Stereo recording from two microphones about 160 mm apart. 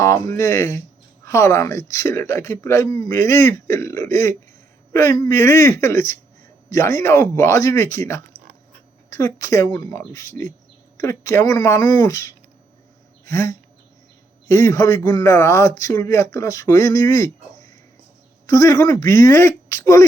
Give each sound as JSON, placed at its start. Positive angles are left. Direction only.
{"t": 0.0, "sound": "speech", "side_deg": 20}